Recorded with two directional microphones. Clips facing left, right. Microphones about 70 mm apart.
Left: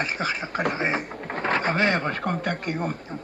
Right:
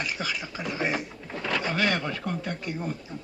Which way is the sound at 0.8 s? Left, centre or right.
Left.